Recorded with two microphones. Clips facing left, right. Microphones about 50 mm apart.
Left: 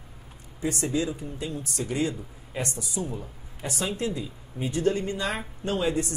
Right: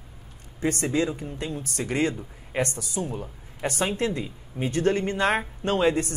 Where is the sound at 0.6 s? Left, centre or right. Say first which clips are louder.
Right 3 dB; right.